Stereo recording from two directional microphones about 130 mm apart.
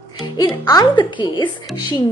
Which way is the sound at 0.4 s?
30° left (ahead or behind).